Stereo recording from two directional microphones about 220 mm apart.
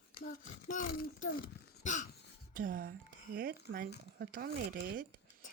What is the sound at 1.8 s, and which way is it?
Cough, 35° left (ahead or behind).